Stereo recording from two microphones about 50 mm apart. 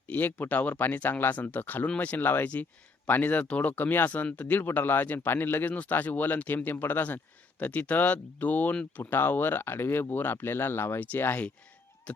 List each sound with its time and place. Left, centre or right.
0.1 s speech: left
5.6 s speech: left
7.6 s speech: left
8.7 s speech: left
9.0 s speech: left
11.0 s speech: left
12.1 s speech: left